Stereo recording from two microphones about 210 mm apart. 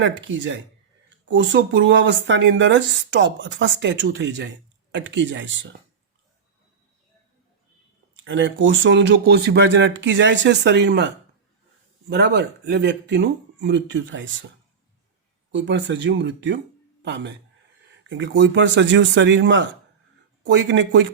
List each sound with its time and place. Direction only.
0.0 s speech: 65° right (ahead or behind)
8.2 s speech: 60° right (ahead or behind)
15.5 s speech: 55° right (ahead or behind)